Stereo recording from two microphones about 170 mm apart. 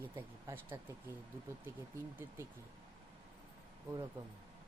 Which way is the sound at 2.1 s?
15° right (ahead or behind).